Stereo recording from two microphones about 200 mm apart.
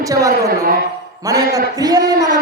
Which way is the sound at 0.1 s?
15° right (ahead or behind).